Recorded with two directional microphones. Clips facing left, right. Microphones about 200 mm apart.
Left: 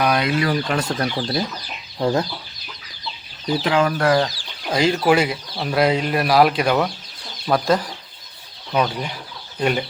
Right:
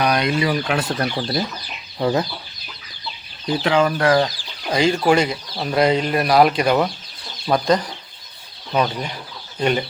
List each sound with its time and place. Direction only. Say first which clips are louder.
0.0 s speech: even; 5° left (ahead or behind)
3.4 s speech: right 1 dB; centre (ahead or behind)